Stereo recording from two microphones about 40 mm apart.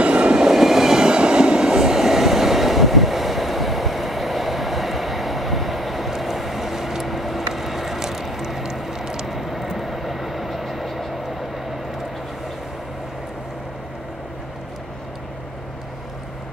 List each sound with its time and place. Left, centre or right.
0.0 s train: right
0.5 s train: centre